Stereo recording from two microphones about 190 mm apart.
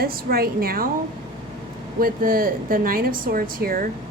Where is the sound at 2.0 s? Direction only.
50° right (ahead or behind).